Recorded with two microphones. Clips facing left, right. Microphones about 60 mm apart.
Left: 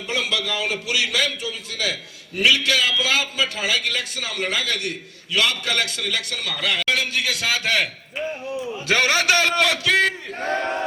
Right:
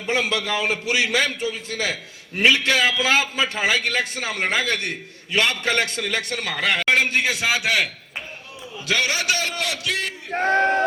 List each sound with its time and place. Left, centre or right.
0.1 s a man's voice: right
7.6 s a man's voice: centre
8.9 s a man's voice: left
10.3 s battle cry: right